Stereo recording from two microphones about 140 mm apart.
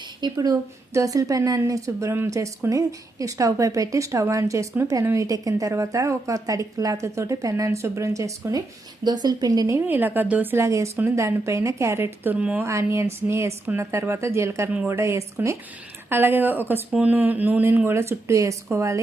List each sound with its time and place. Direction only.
0.2 s a woman's voice: 30° right (ahead or behind)